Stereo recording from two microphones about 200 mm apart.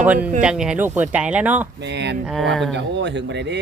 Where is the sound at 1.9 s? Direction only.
60° right (ahead or behind).